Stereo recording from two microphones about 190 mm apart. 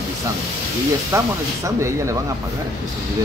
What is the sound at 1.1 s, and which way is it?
Speech, 15° right (ahead or behind).